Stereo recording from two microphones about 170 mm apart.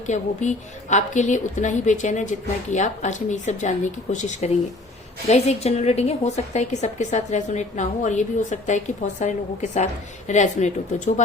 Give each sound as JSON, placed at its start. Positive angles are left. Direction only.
{"t": 0.1, "sound": "a woman's voice", "side_deg": 45}